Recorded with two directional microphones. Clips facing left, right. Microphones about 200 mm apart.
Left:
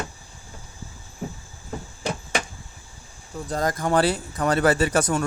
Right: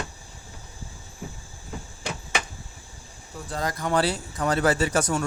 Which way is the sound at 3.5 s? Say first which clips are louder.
Left 4 dB; 45° left (ahead or behind).